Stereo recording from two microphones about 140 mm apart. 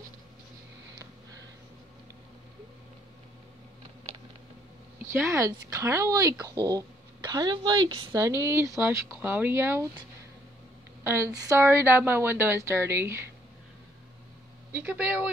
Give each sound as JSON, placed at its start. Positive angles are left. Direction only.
{"t": 5.0, "sound": "a woman's voice", "side_deg": -20}
{"t": 11.1, "sound": "a woman's voice", "side_deg": -20}
{"t": 14.7, "sound": "a woman's voice", "side_deg": -10}